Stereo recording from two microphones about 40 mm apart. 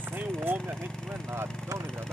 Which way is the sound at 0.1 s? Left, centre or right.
Right.